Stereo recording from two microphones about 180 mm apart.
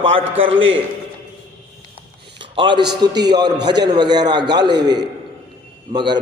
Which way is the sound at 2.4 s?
25° right (ahead or behind).